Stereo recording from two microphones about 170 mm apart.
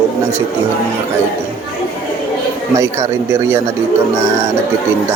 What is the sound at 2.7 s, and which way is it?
Speech, 15° right (ahead or behind).